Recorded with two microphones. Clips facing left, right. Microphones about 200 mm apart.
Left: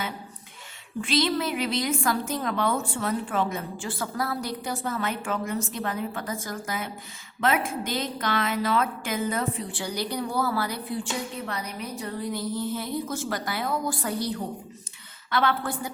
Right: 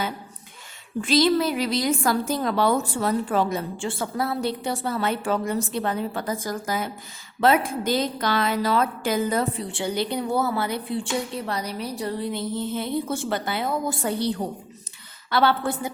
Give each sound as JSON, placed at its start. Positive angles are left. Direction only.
{"t": 1.0, "sound": "a woman's voice", "side_deg": -35}